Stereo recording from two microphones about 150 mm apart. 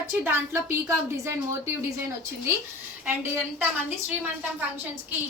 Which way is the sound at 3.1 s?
15° right (ahead or behind).